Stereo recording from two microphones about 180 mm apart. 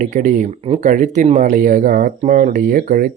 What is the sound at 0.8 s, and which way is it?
Speech, 45° right (ahead or behind).